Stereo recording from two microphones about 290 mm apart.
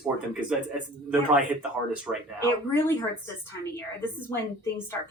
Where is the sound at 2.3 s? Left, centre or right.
Centre.